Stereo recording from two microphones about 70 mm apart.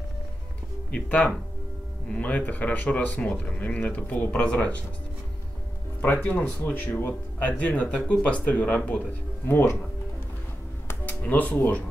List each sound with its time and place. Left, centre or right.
0.9 s speech: centre
3.2 s speech: centre
5.9 s speech: left
10.9 s speech: left